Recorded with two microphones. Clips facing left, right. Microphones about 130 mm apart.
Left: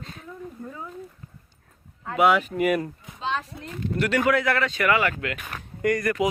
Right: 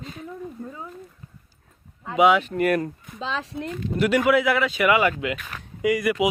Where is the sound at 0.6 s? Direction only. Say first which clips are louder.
Right 2 dB; centre (ahead or behind).